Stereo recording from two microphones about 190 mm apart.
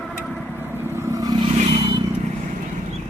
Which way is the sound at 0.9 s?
15° right (ahead or behind).